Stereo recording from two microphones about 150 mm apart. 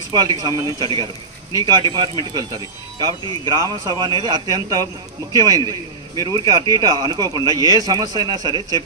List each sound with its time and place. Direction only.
0.1 s speech: 25° right (ahead or behind)